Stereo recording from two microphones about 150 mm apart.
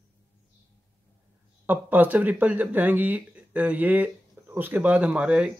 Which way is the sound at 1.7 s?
10° right (ahead or behind).